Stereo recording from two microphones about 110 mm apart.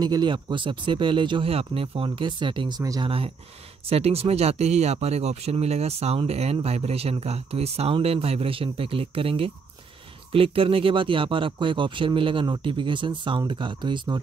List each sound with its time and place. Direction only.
0.0 s speech: 40° right (ahead or behind)
1.5 s speech: 65° right (ahead or behind)
2.0 s speech: 45° right (ahead or behind)
3.0 s speech: 60° right (ahead or behind)